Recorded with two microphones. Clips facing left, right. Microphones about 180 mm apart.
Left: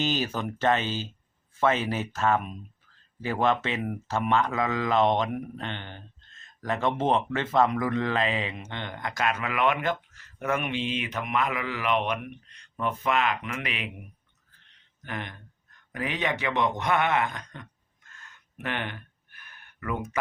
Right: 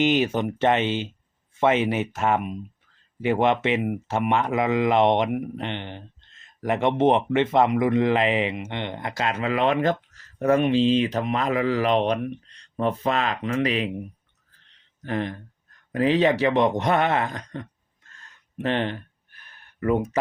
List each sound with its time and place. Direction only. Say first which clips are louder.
0.0 s speech: right 7 dB; 20° right (ahead or behind)
15.0 s speech: right 9 dB; 35° right (ahead or behind)
16.8 s a sound: right 3 dB; 35° right (ahead or behind)